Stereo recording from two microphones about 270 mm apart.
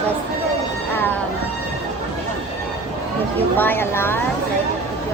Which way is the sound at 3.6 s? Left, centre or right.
Centre.